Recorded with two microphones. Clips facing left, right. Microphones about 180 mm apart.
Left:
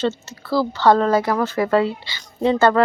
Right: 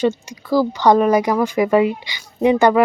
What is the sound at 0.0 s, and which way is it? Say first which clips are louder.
Speech: right 4 dB; 15° right (ahead or behind).